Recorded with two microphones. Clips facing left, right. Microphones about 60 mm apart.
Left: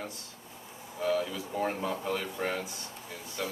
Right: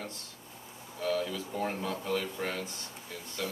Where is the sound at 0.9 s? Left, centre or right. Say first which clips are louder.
Left 2 dB; centre.